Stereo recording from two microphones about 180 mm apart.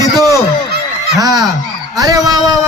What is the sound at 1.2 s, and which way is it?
A man's voice, 20° right (ahead or behind).